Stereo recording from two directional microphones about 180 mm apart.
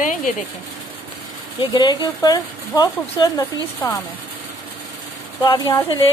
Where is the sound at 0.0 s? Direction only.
45° left (ahead or behind).